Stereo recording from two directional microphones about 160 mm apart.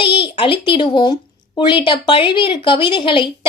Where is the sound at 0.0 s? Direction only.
30° left (ahead or behind).